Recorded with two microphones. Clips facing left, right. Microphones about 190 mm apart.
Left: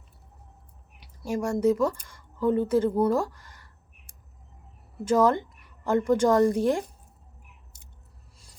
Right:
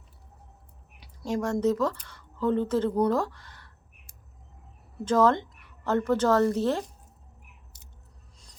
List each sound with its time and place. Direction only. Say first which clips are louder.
0.9 s a woman's voice: even; 10° left (ahead or behind)
5.0 s a woman's voice: left 1 dB; 10° left (ahead or behind)